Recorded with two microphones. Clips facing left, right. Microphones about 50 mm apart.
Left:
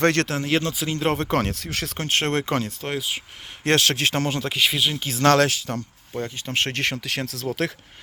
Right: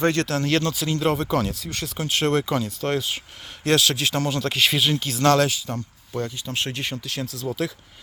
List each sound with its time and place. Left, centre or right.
0.0 s speech: left
0.3 s speech: left
1.2 s speech: left
2.0 s speech: left
2.8 s speech: centre
3.6 s speech: left
4.4 s speech: centre
4.9 s speech: left
5.2 s speech: left
6.3 s speech: left
6.6 s speech: left